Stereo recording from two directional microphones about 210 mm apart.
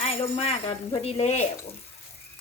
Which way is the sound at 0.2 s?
30° left (ahead or behind).